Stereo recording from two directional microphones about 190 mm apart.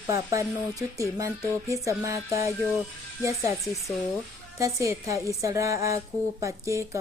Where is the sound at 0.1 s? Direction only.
15° right (ahead or behind).